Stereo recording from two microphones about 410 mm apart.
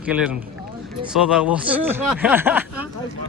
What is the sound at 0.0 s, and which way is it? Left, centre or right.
Speech, centre.